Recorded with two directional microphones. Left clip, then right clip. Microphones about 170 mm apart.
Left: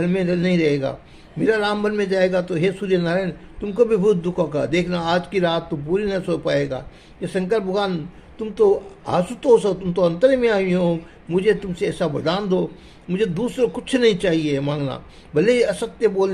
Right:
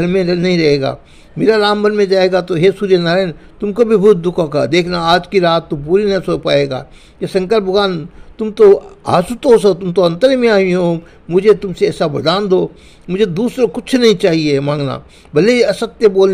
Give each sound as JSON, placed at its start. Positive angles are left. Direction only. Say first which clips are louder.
{"t": 0.0, "sound": "a man's voice", "louder": "right 7 dB", "side_deg": -40}